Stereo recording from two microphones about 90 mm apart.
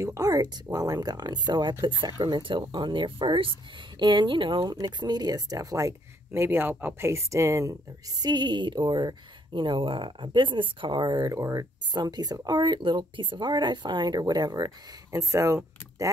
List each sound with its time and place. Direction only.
0.0 s speech: 40° right (ahead or behind); by 4.7 s 60° right (ahead or behind)
4.8 s speech: 50° right (ahead or behind); by 7.7 s 35° right (ahead or behind)
8.2 s speech: 55° right (ahead or behind)
11.2 s speech: 40° right (ahead or behind)
11.9 s speech: 50° right (ahead or behind); by 16.1 s 35° right (ahead or behind)